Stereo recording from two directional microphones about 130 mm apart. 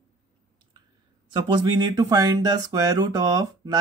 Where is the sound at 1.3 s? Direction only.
35° right (ahead or behind).